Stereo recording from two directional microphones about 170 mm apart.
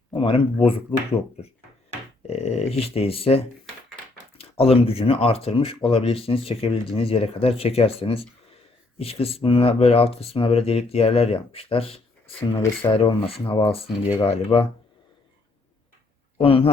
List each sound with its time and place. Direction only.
0.1 s speech: 30° left (ahead or behind)
2.2 s speech: 40° left (ahead or behind)
16.4 s speech: 35° left (ahead or behind)